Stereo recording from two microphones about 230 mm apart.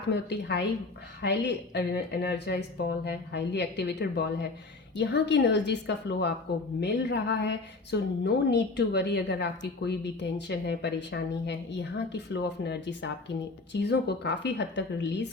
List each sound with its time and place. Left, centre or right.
0.1 s a woman's voice: left